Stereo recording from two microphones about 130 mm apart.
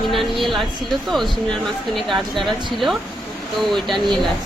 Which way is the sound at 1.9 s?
Centre (ahead or behind).